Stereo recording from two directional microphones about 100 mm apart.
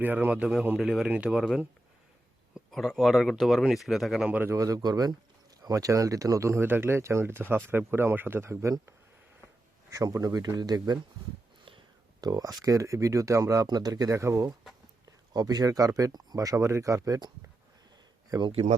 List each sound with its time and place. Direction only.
0.0 s speech: 20° right (ahead or behind)
0.8 s speech: 5° right (ahead or behind)
2.7 s speech: 5° left (ahead or behind)
4.3 s speech: 20° right (ahead or behind)
4.5 s speech: 35° right (ahead or behind)
12.2 s speech: 40° right (ahead or behind)
15.3 s speech: 40° right (ahead or behind)